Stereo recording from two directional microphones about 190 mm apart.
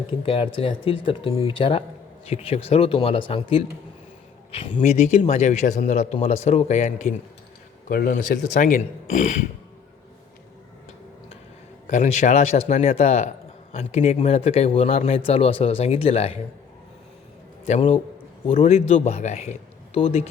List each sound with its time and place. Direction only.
0.2 s speech: 30° left (ahead or behind)
4.8 s speech: 35° left (ahead or behind)
7.9 s speech: 50° left (ahead or behind)
11.9 s speech: 35° left (ahead or behind)
17.7 s speech: 35° left (ahead or behind)